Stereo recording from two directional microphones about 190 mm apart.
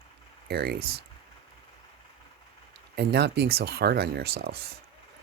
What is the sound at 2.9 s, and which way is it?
Speech, 60° right (ahead or behind).